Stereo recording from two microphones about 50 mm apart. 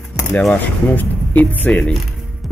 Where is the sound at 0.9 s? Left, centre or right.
Left.